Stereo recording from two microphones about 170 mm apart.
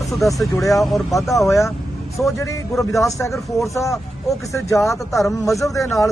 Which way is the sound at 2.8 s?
20° left (ahead or behind).